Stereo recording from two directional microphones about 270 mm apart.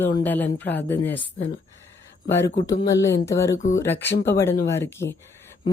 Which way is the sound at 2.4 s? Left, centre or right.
Left.